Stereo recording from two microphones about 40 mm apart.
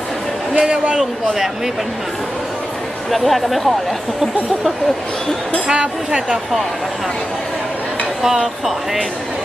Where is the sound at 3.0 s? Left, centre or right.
Centre.